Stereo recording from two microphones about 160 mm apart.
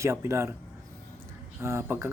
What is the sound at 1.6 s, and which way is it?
Speech, 15° right (ahead or behind).